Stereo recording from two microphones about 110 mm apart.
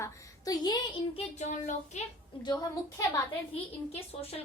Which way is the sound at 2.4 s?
35° left (ahead or behind).